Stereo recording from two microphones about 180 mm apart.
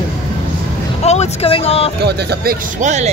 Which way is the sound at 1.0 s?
35° left (ahead or behind).